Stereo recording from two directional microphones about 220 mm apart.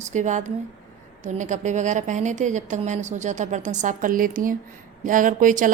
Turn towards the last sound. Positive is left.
turn(degrees=-35)  # may be behind; listen again after turning